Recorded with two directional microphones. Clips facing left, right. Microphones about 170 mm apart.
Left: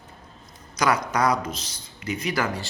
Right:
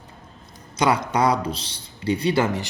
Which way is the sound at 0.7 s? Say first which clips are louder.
Right 2 dB; 25° right (ahead or behind).